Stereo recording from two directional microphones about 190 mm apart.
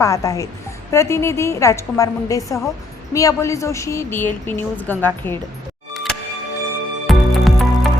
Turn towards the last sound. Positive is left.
turn(degrees=0)  # may be behind; listen again after turning